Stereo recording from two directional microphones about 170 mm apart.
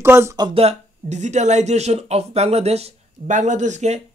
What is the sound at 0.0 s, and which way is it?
Speech, 15° right (ahead or behind).